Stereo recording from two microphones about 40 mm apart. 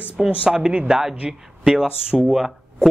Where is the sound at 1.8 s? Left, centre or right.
Right.